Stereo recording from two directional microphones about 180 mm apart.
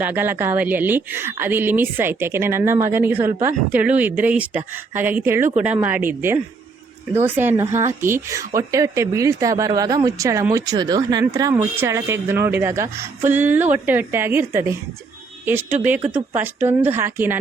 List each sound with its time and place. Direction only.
0.0 s speech: 10° right (ahead or behind)